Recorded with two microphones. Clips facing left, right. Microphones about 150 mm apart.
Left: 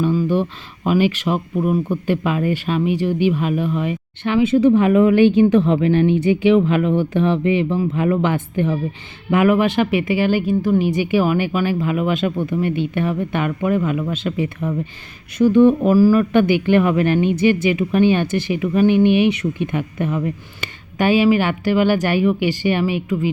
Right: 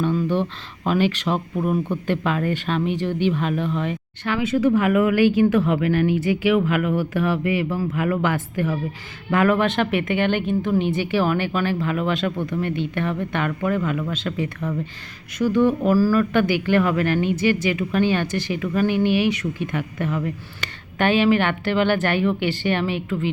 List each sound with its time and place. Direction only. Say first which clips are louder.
0.0 s a sound: left 3 dB; 5° left (ahead or behind)
0.9 s speech: left 3 dB; 10° left (ahead or behind)
4.2 s speech: left 6 dB; 20° left (ahead or behind)